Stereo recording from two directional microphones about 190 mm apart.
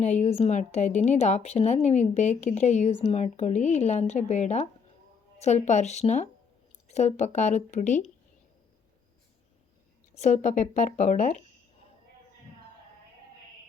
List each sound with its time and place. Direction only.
0.0 s a woman's voice: 35° left (ahead or behind)
10.2 s a woman's voice: 40° left (ahead or behind)